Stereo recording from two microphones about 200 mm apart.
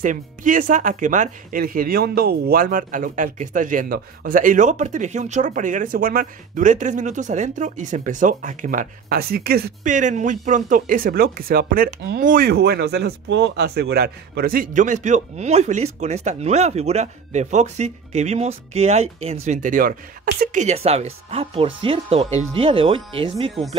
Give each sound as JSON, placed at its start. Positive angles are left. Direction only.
{"t": 0.0, "sound": "speech", "side_deg": -40}